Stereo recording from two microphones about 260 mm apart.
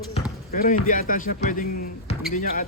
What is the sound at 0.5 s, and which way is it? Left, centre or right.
Speech, left.